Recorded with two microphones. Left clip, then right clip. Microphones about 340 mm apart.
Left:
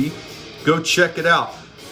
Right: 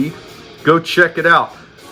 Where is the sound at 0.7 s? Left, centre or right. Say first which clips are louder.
Right 5 dB; centre.